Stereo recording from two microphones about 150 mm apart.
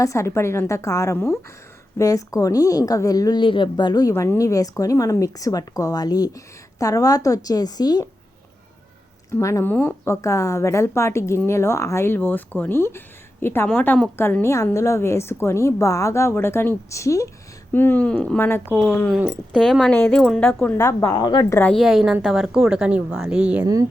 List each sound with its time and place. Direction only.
0.0 s speech: 20° left (ahead or behind)
9.3 s a woman's voice: 20° left (ahead or behind)
19.5 s a woman's voice: 5° left (ahead or behind)
20.7 s speech: 20° left (ahead or behind)
21.6 s a woman's voice: 5° left (ahead or behind)